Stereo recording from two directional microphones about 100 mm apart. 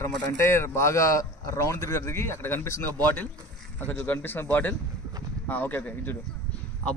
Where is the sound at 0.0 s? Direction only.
25° left (ahead or behind).